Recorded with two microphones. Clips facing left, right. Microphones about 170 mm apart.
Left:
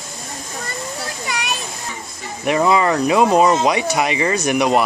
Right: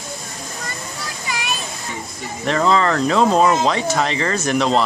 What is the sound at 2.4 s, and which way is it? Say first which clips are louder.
Speech: left 1 dB; 10° left (ahead or behind).